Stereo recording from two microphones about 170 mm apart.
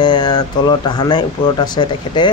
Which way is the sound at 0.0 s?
25° left (ahead or behind).